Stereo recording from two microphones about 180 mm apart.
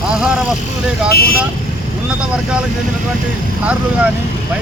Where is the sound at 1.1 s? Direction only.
55° left (ahead or behind).